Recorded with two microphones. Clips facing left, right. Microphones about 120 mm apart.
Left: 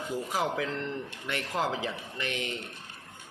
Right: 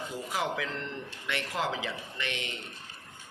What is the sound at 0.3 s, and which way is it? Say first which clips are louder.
Speech: left 1 dB; 40° left (ahead or behind).